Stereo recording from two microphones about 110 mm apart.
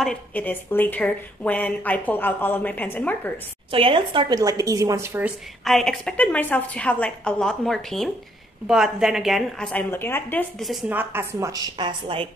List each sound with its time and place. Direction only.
0.3 s speech: 15° left (ahead or behind)
3.7 s speech: 55° right (ahead or behind)
4.4 s a woman's voice: 30° right (ahead or behind)
5.6 s a woman's voice: centre (ahead or behind)
9.8 s speech: 20° left (ahead or behind)
10.6 s a woman's voice: centre (ahead or behind)
10.9 s a woman's voice: 20° right (ahead or behind)
11.8 s a woman's voice: 55° right (ahead or behind)